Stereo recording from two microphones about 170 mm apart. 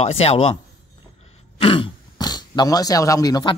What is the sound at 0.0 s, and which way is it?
Speech, 35° left (ahead or behind).